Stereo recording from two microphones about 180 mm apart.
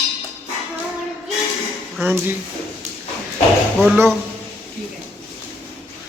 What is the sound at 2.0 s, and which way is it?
Speech, 10° right (ahead or behind).